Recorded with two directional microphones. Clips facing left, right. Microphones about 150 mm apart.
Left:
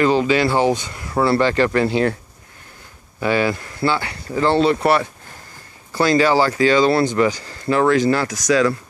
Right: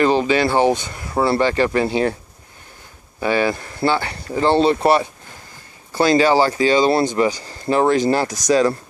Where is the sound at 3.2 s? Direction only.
30° right (ahead or behind).